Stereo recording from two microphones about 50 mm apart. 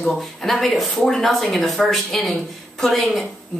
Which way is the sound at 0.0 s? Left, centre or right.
Centre.